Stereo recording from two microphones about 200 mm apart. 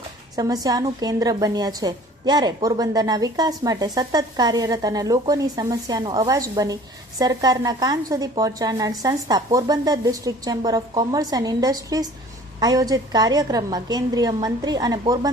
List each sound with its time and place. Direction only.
0.3 s a woman's voice: 20° right (ahead or behind)